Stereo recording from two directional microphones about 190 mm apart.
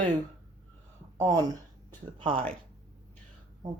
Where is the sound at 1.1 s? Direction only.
20° right (ahead or behind).